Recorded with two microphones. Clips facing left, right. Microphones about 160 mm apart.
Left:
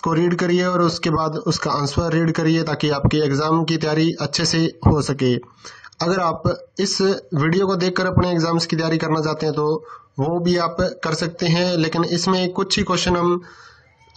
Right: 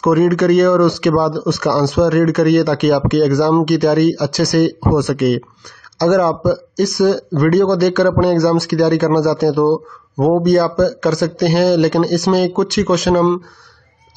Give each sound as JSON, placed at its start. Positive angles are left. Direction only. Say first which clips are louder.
{"t": 0.0, "sound": "speech", "louder": "right 6 dB", "side_deg": -55}